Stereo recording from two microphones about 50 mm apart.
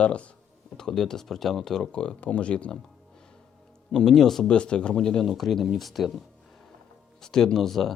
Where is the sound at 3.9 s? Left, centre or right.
Centre.